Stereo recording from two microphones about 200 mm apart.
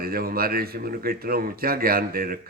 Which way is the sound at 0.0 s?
50° right (ahead or behind).